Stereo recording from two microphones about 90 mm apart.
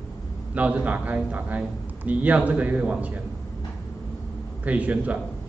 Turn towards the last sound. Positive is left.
turn(degrees=-15)  # may be behind; listen again after turning